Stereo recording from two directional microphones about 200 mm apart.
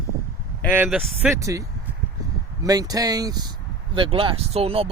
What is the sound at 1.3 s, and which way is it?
Speech, 15° right (ahead or behind).